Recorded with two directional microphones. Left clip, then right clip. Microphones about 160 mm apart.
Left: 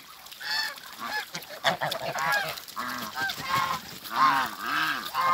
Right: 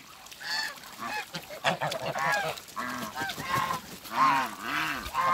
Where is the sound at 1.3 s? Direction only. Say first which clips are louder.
Left 2 dB; 40° right (ahead or behind).